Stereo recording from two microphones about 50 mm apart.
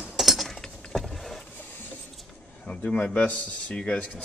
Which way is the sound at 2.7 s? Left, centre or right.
Left.